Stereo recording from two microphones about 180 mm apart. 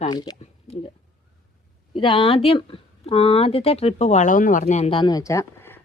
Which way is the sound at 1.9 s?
30° left (ahead or behind).